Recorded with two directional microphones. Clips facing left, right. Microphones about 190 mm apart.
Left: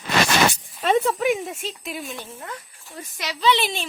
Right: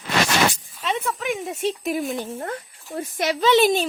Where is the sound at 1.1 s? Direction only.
10° left (ahead or behind).